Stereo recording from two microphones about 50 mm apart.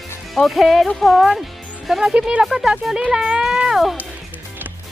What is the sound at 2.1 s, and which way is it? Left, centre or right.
Speech, right.